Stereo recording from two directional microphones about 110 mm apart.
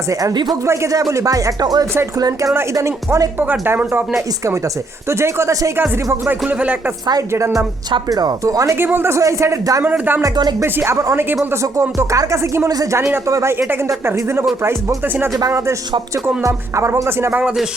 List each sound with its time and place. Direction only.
0.1 s speech: 30° right (ahead or behind)
5.0 s speech: 25° right (ahead or behind)
7.1 s speech: 30° right (ahead or behind)
7.9 s speech: 40° right (ahead or behind)
9.8 s speech: 15° right (ahead or behind)